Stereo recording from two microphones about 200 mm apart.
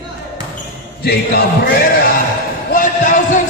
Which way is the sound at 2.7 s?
40° left (ahead or behind).